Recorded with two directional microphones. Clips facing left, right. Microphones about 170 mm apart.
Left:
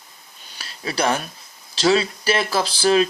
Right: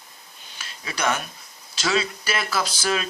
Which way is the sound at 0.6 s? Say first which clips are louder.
Left 5 dB; 35° left (ahead or behind).